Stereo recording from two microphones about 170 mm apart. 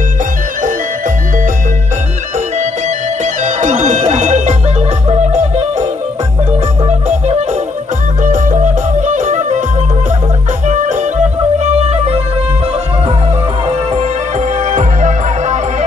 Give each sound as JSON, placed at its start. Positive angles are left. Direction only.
{"t": 3.4, "sound": "music", "side_deg": -45}
{"t": 8.2, "sound": "music", "side_deg": -50}
{"t": 10.7, "sound": "music", "side_deg": -45}
{"t": 14.6, "sound": "music", "side_deg": -45}